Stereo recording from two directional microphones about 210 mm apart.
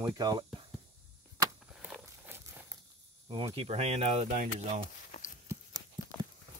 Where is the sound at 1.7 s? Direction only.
5° right (ahead or behind).